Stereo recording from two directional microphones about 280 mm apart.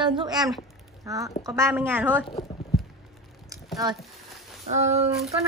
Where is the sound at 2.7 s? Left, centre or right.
Centre.